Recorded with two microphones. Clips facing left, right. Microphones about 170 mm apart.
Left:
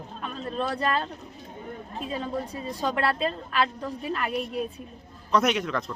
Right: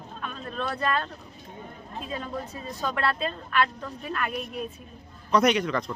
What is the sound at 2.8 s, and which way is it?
A woman's voice, 35° left (ahead or behind).